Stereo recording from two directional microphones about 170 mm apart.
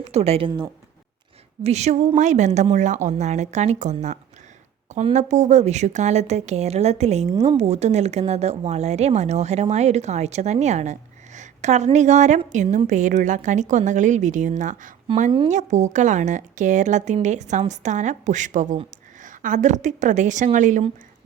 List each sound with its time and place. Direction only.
0.1 s a woman's voice: 40° right (ahead or behind)
1.6 s a woman's voice: 40° right (ahead or behind)